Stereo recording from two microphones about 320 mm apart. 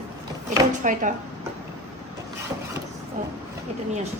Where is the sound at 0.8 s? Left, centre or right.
Right.